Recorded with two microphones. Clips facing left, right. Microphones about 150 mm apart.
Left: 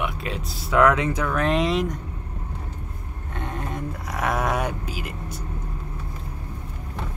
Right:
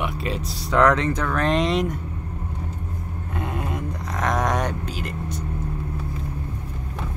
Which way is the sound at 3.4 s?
5° right (ahead or behind).